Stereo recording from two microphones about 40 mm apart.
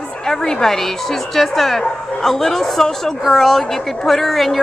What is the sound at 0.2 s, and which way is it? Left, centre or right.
A woman's voice, centre.